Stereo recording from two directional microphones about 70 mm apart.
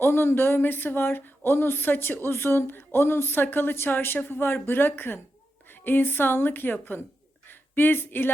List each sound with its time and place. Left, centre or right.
0.0 s speech: left